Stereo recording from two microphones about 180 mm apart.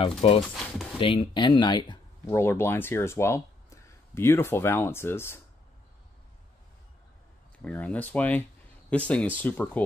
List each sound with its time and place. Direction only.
0.2 s speech: 30° left (ahead or behind); by 5.4 s 15° left (ahead or behind)
7.6 s speech: 10° left (ahead or behind)